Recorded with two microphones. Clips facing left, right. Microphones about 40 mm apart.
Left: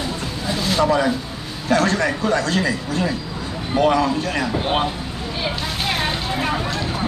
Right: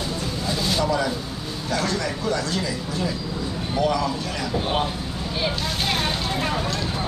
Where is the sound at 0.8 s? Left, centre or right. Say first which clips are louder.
Left 8 dB; left.